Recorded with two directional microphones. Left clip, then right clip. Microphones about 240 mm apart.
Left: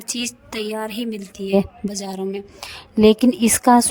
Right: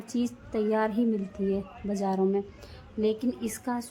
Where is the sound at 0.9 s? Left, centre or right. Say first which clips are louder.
Left 1 dB; left.